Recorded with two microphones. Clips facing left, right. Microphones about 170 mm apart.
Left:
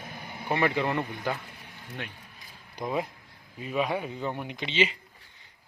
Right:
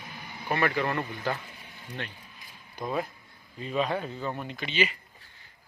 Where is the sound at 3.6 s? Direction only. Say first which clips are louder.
Even; 10° left (ahead or behind).